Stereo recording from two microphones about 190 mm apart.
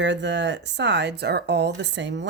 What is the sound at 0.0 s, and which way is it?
Speech, 65° right (ahead or behind).